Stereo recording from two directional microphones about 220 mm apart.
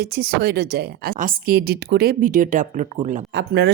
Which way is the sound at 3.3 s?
50° right (ahead or behind).